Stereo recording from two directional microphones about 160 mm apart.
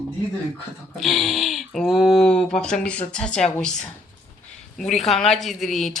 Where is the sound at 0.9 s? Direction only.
Centre (ahead or behind).